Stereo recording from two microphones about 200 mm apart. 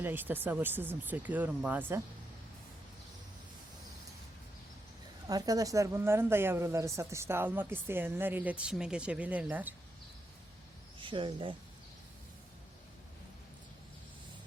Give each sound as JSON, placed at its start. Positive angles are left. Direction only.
{"t": 0.0, "sound": "a woman's voice", "side_deg": -10}
{"t": 5.3, "sound": "a woman's voice", "side_deg": -20}
{"t": 11.0, "sound": "speech", "side_deg": -25}